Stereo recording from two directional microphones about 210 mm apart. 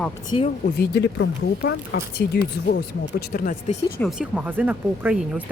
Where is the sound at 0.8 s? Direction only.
55° left (ahead or behind).